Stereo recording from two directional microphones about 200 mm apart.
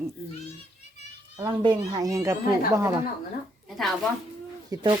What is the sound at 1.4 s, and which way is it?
Speech, 20° right (ahead or behind).